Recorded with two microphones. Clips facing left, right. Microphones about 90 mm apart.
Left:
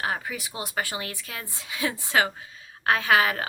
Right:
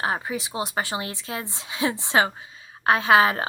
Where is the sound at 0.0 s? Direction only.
25° right (ahead or behind).